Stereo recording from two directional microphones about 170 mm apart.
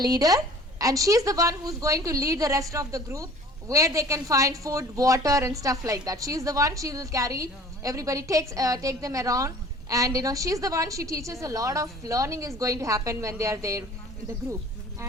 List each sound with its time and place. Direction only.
0.0 s speech: 20° right (ahead or behind)